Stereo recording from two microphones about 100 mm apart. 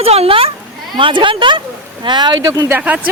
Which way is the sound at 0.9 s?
55° right (ahead or behind).